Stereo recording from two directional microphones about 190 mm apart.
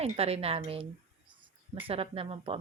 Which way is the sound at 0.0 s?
30° right (ahead or behind).